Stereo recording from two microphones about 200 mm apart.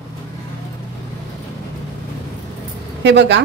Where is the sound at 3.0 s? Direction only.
60° right (ahead or behind).